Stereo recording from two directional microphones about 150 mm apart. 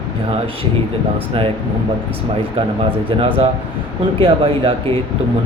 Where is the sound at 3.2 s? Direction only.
35° right (ahead or behind).